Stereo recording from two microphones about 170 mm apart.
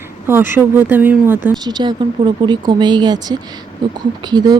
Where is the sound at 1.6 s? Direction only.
25° right (ahead or behind).